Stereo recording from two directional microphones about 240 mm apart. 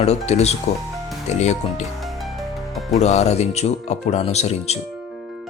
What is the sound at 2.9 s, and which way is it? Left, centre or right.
Speech, left.